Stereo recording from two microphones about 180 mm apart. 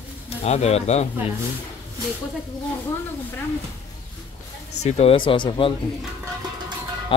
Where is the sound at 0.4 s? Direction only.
35° left (ahead or behind).